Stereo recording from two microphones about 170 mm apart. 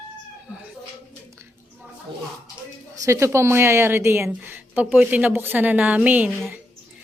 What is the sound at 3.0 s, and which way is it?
A woman's voice, 15° right (ahead or behind).